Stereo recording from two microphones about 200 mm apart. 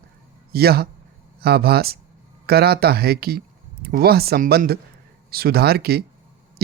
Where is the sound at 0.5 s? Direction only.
50° right (ahead or behind).